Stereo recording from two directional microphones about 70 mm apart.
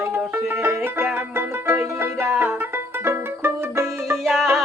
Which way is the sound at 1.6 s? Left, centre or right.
Right.